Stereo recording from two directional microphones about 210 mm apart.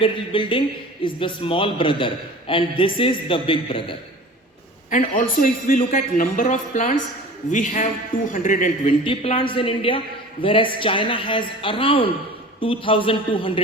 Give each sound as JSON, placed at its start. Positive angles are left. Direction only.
{"t": 0.0, "sound": "a man's voice", "side_deg": 25}
{"t": 4.9, "sound": "a man's voice", "side_deg": 40}
{"t": 9.0, "sound": "a man's voice", "side_deg": 25}